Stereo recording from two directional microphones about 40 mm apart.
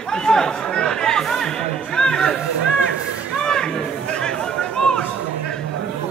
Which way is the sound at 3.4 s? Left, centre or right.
Centre.